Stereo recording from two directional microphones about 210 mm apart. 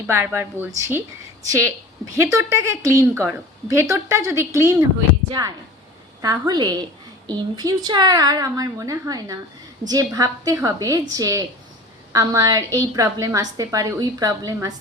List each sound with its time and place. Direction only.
0.1 s a woman's voice: 10° right (ahead or behind)